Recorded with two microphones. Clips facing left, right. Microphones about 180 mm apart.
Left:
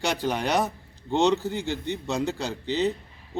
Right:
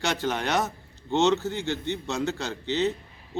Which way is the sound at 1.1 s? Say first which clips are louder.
Even; centre (ahead or behind).